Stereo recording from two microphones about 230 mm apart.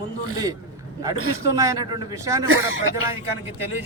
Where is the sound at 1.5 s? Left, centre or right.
Centre.